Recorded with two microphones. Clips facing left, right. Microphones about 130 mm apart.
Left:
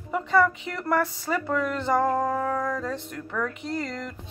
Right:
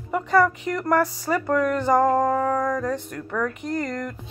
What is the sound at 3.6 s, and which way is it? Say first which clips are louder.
Music: right 3 dB; 50° right (ahead or behind).